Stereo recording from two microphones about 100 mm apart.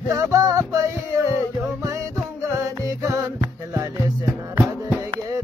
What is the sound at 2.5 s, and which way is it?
Music, 35° right (ahead or behind).